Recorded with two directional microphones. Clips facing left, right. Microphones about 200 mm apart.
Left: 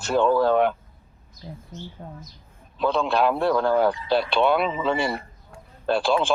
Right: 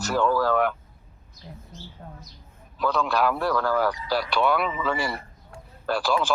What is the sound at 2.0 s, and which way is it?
Speech, 30° left (ahead or behind).